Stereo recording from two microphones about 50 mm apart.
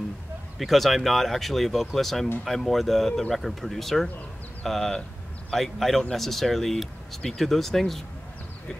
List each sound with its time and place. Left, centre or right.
0.6 s speech: centre